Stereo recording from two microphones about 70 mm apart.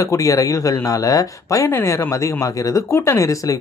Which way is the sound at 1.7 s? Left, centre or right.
Left.